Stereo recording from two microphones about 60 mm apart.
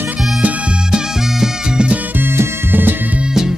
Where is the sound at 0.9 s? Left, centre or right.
Centre.